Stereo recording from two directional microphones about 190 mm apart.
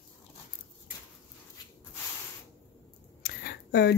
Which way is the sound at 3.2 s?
55° left (ahead or behind).